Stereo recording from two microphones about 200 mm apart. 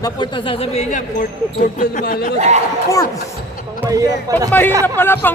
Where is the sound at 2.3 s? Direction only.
35° right (ahead or behind).